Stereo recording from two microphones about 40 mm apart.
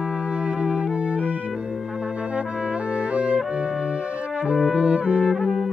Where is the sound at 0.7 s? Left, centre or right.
Centre.